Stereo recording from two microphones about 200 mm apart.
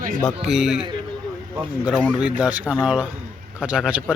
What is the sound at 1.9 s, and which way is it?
Speech, centre (ahead or behind).